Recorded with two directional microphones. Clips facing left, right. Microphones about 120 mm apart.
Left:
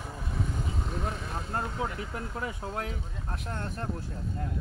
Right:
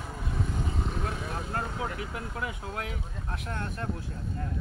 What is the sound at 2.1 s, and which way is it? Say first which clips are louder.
Speech: even; 35° left (ahead or behind).